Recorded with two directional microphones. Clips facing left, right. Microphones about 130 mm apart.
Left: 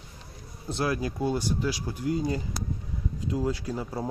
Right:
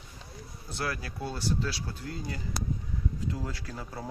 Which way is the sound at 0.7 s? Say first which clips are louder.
Left 7 dB; 20° left (ahead or behind).